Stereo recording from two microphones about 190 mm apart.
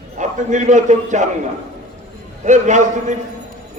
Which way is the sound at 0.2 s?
40° right (ahead or behind).